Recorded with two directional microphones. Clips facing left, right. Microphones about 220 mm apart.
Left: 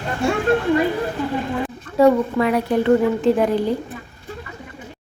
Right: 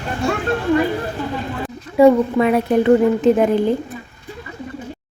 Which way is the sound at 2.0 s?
10° right (ahead or behind).